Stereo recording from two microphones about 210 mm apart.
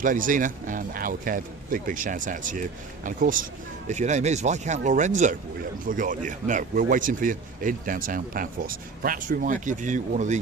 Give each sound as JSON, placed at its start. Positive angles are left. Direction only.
{"t": 0.0, "sound": "speech", "side_deg": -40}